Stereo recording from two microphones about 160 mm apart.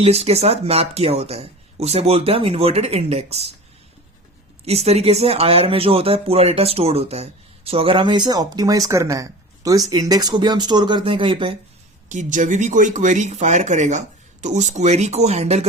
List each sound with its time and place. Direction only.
0.0 s speech: 40° right (ahead or behind)
4.6 s speech: 40° right (ahead or behind)
12.0 s speech: 50° right (ahead or behind)